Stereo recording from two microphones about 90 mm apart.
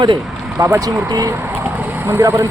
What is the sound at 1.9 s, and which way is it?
Speech, 25° right (ahead or behind).